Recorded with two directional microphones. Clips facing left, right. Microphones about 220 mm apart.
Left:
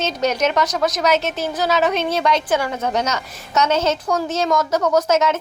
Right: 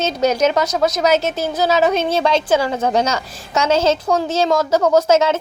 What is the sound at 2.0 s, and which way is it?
A woman's voice, 30° right (ahead or behind).